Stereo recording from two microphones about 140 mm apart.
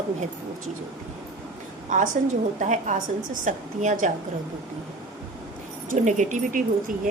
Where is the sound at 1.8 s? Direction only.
70° right (ahead or behind).